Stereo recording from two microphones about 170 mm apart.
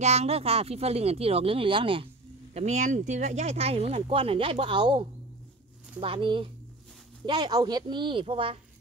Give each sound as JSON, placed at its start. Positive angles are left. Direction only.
{"t": 0.0, "sound": "speech", "side_deg": -40}
{"t": 2.5, "sound": "speech", "side_deg": -45}